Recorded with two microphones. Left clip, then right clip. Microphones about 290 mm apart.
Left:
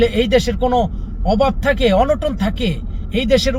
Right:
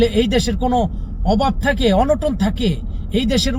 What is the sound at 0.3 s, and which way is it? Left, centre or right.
A man's voice, centre.